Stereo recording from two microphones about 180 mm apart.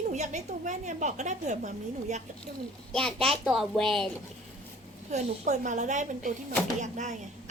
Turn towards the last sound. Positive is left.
turn(degrees=-40)  # may be behind; listen again after turning